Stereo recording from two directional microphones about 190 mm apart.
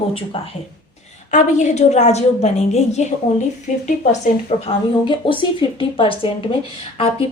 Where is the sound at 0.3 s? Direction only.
30° left (ahead or behind).